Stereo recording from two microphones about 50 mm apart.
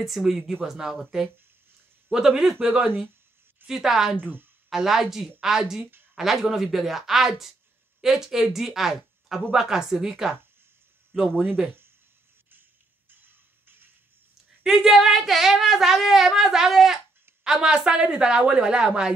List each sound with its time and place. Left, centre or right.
0.0 s a woman's voice: centre
2.0 s a woman's voice: centre
3.6 s a woman's voice: centre
4.2 s speech: right
4.6 s a woman's voice: centre
11.1 s speech: centre
11.4 s speech: right
13.1 s music: right
14.6 s a woman's voice: centre